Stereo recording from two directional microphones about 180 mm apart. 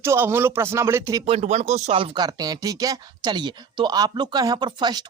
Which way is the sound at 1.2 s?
35° right (ahead or behind).